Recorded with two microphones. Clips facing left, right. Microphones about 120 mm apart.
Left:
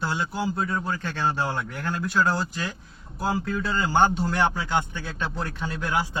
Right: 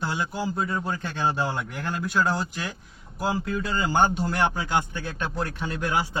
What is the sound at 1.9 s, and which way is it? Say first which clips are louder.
Speech: left 1 dB; 15° right (ahead or behind).